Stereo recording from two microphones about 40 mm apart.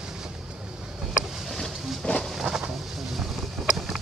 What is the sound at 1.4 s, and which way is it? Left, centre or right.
Wild animals, centre.